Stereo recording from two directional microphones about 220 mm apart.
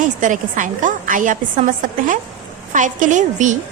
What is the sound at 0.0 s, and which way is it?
A woman's voice, 35° right (ahead or behind).